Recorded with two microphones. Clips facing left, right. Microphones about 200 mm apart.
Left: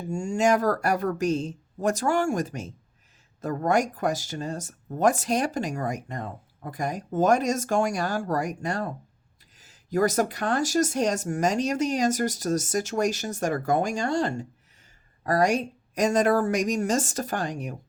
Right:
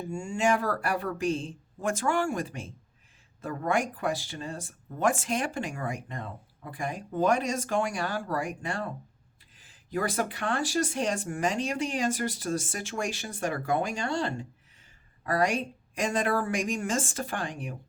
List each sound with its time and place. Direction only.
0.1 s speech: 40° left (ahead or behind)